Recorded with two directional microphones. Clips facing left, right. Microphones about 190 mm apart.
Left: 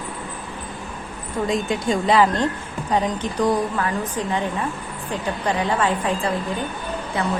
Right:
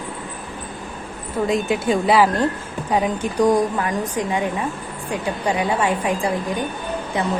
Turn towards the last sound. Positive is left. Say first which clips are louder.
# right 2 dB
turn(degrees=-20)  # may be behind; listen again after turning